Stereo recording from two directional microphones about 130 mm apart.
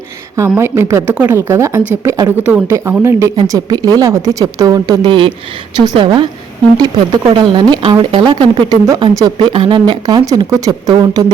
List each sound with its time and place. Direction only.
0.3 s a woman's voice: 20° right (ahead or behind)